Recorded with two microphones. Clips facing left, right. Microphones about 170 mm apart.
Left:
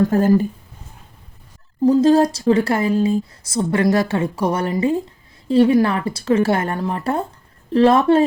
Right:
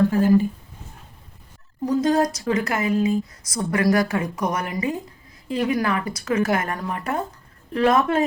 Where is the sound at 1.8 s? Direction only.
30° left (ahead or behind).